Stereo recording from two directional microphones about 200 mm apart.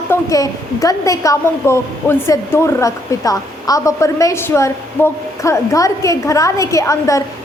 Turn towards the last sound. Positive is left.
turn(degrees=15)  # may be behind; listen again after turning